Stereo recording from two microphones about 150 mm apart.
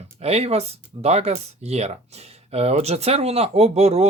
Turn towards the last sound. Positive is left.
turn(degrees=-45)  # may be behind; listen again after turning